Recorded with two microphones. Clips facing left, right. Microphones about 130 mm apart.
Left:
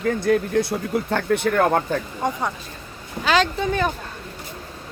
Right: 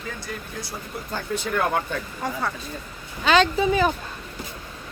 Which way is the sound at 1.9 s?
40° left (ahead or behind).